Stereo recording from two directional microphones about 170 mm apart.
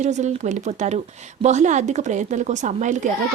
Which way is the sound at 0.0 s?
45° right (ahead or behind).